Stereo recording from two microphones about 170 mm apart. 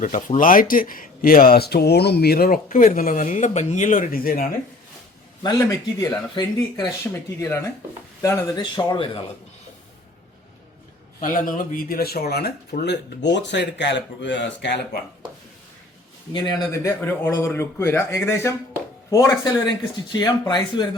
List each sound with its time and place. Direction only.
0.0 s speech: 50° left (ahead or behind)
5.4 s speech: 20° left (ahead or behind)
11.2 s speech: 50° left (ahead or behind); by 15.0 s 90° left
16.3 s speech: 25° left (ahead or behind)